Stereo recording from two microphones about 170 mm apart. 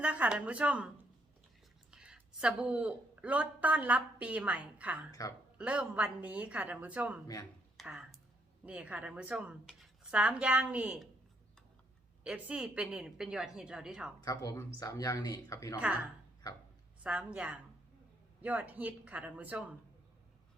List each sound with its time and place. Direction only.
0.0 s a woman's voice: 10° right (ahead or behind)
1.9 s a woman's voice: 5° right (ahead or behind)
7.9 s a sound: 5° right (ahead or behind)
8.6 s a woman's voice: 10° right (ahead or behind)
12.2 s a woman's voice: 5° right (ahead or behind)
14.2 s speech: 20° left (ahead or behind)
17.0 s a woman's voice: 10° right (ahead or behind)